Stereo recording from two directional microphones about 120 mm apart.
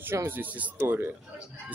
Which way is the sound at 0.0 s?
20° right (ahead or behind).